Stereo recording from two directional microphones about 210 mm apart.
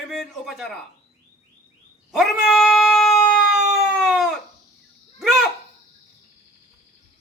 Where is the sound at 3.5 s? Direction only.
35° right (ahead or behind).